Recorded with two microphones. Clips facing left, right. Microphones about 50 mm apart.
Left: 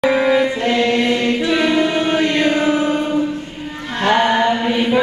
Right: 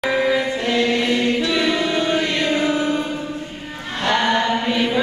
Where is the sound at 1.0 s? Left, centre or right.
Left.